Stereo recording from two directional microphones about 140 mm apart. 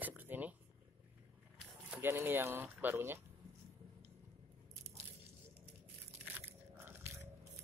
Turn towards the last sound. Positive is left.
turn(degrees=-20)  # may be behind; listen again after turning